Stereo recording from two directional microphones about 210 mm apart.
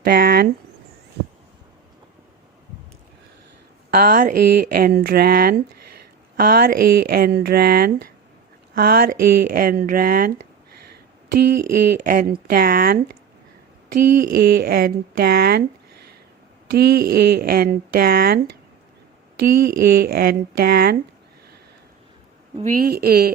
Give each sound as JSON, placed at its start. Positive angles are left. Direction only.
{"t": 0.0, "sound": "a sound", "side_deg": -45}
{"t": 3.9, "sound": "speech", "side_deg": -45}
{"t": 14.2, "sound": "speech", "side_deg": -45}
{"t": 16.6, "sound": "speech", "side_deg": -50}
{"t": 19.4, "sound": "speech", "side_deg": -45}
{"t": 22.5, "sound": "speech", "side_deg": -40}